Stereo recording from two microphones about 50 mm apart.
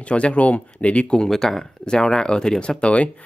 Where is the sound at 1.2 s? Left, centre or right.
Centre.